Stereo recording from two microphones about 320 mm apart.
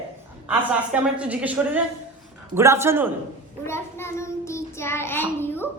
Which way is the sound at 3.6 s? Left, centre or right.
Centre.